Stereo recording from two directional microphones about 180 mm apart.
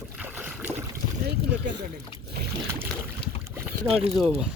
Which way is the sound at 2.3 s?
60° right (ahead or behind).